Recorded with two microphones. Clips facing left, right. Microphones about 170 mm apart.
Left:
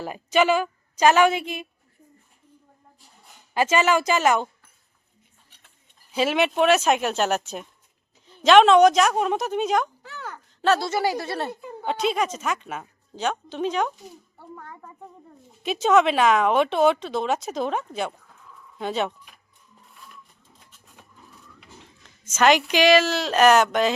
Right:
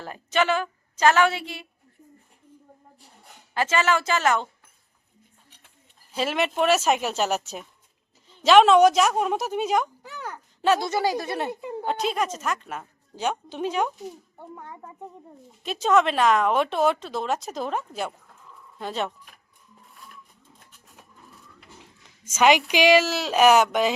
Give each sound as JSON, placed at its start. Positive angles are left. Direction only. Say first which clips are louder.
{"t": 0.0, "sound": "a woman's voice", "louder": "left 4 dB", "side_deg": 10}
{"t": 3.5, "sound": "speech", "louder": "left 3 dB", "side_deg": 15}
{"t": 6.1, "sound": "a woman's voice", "louder": "left 3 dB", "side_deg": 0}
{"t": 11.9, "sound": "speech", "louder": "left 2 dB", "side_deg": 0}
{"t": 13.1, "sound": "a woman's voice", "louder": "left 1 dB", "side_deg": -10}
{"t": 14.3, "sound": "a child's voice", "louder": "right 1 dB", "side_deg": -20}
{"t": 15.6, "sound": "speech", "louder": "left 2 dB", "side_deg": 0}
{"t": 20.7, "sound": "a sound", "louder": "left 2 dB", "side_deg": 0}
{"t": 22.0, "sound": "a woman's voice", "louder": "even", "side_deg": -10}